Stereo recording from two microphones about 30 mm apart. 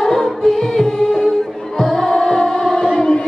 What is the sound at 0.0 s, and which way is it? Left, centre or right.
Music, centre.